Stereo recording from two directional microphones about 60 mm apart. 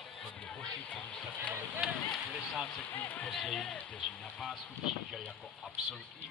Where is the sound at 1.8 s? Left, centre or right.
Centre.